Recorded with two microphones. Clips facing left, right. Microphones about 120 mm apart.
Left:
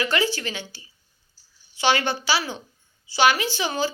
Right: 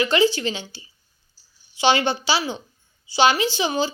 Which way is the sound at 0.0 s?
20° right (ahead or behind).